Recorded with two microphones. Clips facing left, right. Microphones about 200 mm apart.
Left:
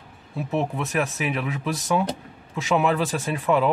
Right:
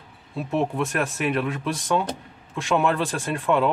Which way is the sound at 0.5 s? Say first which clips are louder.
Right 2 dB; centre (ahead or behind).